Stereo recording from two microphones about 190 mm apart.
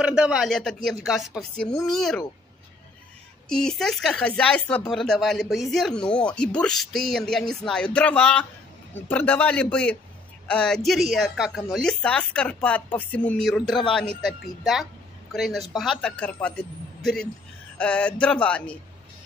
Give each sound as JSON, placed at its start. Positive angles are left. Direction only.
{"t": 0.0, "sound": "speech", "side_deg": -5}
{"t": 3.4, "sound": "a man's voice", "side_deg": 5}